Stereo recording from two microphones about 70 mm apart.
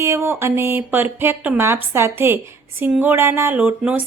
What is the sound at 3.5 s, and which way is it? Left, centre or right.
Speech, right.